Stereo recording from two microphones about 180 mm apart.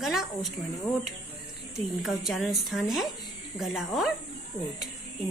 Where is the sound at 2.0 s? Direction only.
Centre (ahead or behind).